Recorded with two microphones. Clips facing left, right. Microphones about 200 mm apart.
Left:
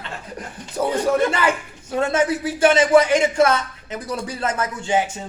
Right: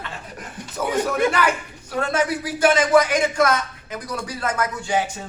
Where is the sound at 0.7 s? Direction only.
30° left (ahead or behind).